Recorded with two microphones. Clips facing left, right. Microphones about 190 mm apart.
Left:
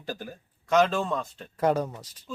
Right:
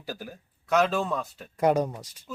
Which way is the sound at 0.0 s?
5° right (ahead or behind).